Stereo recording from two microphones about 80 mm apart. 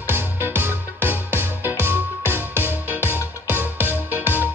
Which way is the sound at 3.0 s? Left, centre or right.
Left.